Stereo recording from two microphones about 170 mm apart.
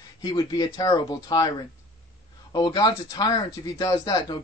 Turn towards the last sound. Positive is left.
turn(degrees=25)  # may be behind; listen again after turning